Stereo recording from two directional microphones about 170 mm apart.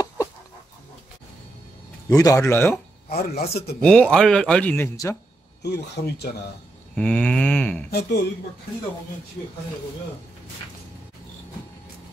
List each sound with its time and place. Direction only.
2.1 s speech: 20° left (ahead or behind)
3.1 s speech: 65° left (ahead or behind)
3.8 s speech: 5° left (ahead or behind)
5.6 s speech: 80° left
7.0 s a sound: 5° left (ahead or behind)
7.9 s speech: 75° left (ahead or behind)